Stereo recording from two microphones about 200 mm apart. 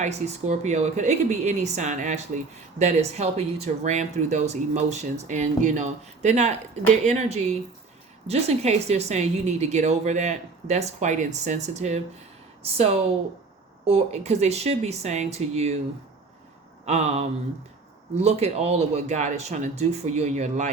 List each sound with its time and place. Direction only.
0.0 s a woman's voice: 35° right (ahead or behind)
16.8 s a woman's voice: 35° right (ahead or behind)